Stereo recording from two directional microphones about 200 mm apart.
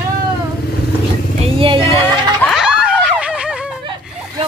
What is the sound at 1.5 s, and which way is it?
Speech, 25° right (ahead or behind).